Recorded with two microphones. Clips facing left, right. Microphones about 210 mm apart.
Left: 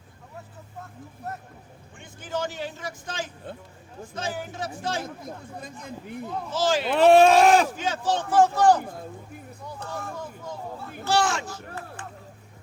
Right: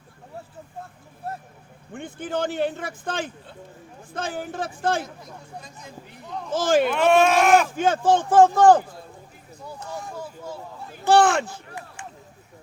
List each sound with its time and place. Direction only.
0.8 s speech: 30° right (ahead or behind)
1.9 s speech: 55° right (ahead or behind)
5.5 s speech: 55° left (ahead or behind)
6.2 s speech: 5° left (ahead or behind)
6.5 s speech: 50° right (ahead or behind)
6.8 s speech: 35° left (ahead or behind)
7.8 s speech: 50° right (ahead or behind)
9.6 s a sound: 15° right (ahead or behind)
11.0 s speech: 55° right (ahead or behind)
11.8 s a sound: 15° right (ahead or behind)